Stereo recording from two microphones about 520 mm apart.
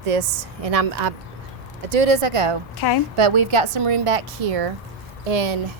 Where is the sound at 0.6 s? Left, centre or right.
Right.